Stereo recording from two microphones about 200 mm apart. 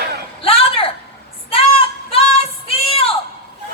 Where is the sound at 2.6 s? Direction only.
30° left (ahead or behind).